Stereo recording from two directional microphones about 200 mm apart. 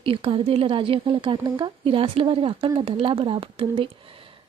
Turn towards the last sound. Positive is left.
turn(degrees=-25)  # may be behind; listen again after turning